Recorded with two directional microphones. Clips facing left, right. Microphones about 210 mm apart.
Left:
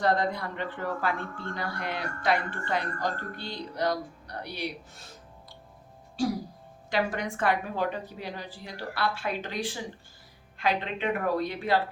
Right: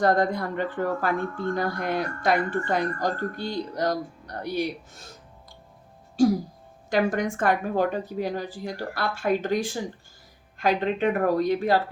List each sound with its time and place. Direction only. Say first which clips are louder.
0.0 s speech: right 5 dB; 45° right (ahead or behind)
6.2 s speech: right 8 dB; 45° right (ahead or behind)